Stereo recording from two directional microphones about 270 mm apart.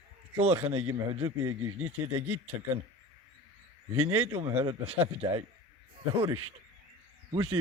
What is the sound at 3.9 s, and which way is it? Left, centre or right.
Speech, right.